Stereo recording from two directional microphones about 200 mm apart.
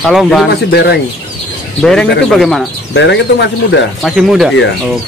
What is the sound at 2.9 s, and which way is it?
Speech, 55° left (ahead or behind).